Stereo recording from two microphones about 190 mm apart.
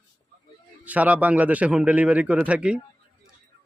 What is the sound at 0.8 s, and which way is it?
A man's voice, 5° right (ahead or behind).